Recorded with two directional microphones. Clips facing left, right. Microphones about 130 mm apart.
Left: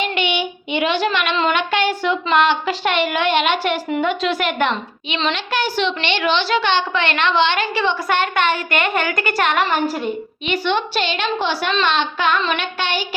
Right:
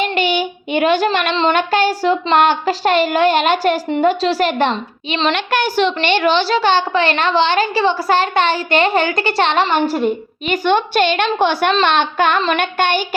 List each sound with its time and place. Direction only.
0.0 s child singing: 40° right (ahead or behind)
1.5 s a woman's voice: 40° right (ahead or behind)
5.3 s a woman's voice: 55° right (ahead or behind); by 10.0 s 30° right (ahead or behind)
10.5 s a woman's voice: 50° right (ahead or behind)